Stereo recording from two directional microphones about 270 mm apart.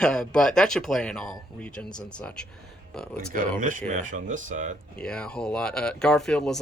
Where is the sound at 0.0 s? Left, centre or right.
Centre.